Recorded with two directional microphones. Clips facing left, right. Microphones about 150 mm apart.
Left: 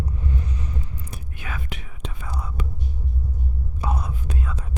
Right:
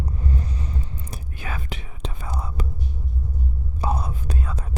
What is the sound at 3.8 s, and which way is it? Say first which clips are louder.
Whispering: right 3 dB; 35° right (ahead or behind).